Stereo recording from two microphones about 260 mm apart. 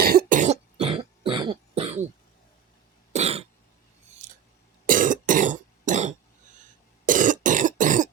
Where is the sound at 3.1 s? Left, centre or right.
Right.